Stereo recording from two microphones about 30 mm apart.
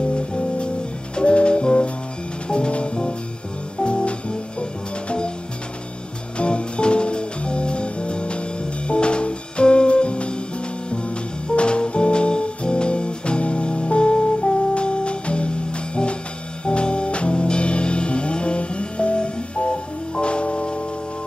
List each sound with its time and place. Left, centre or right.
1.1 s music: left
6.3 s music: left
11.4 s music: left
16.6 s music: left